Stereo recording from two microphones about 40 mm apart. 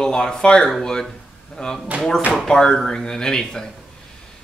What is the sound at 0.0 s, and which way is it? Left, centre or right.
Speech, centre.